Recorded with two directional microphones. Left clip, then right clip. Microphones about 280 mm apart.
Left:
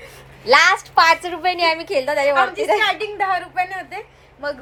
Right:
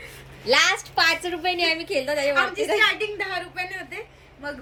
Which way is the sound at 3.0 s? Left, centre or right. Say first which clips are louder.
Left 7 dB; centre.